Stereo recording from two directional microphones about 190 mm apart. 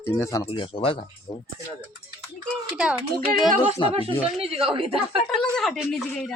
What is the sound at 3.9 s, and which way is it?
A woman's voice, 30° right (ahead or behind).